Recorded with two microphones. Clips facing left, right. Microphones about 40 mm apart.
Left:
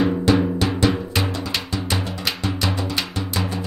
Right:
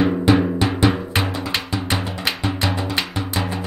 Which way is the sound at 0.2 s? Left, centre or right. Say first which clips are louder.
Right 2 dB; centre.